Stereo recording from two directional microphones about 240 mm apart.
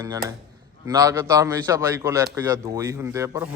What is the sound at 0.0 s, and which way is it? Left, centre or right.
A man's voice, centre.